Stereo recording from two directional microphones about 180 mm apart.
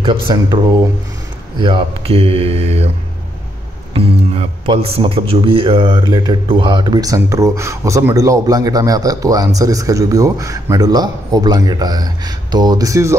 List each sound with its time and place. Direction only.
0.0 s speech: 25° right (ahead or behind)
1.6 s speech: 30° right (ahead or behind)
3.9 s speech: 35° right (ahead or behind); by 13.1 s 20° right (ahead or behind)